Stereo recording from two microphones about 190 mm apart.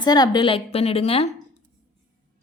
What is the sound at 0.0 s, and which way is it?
A woman's voice, 20° left (ahead or behind).